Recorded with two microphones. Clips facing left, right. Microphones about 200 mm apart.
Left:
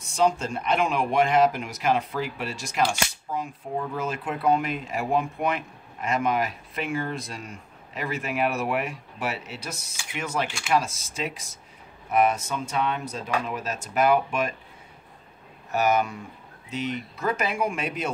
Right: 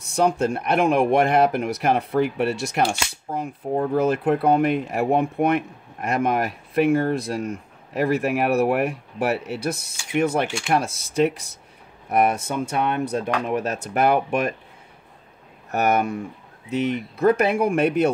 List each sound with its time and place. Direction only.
0.0 s speech: 60° right (ahead or behind)
15.7 s speech: 60° right (ahead or behind)